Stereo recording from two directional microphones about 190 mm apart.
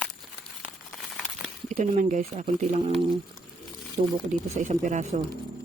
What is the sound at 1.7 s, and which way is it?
Speech, 40° right (ahead or behind).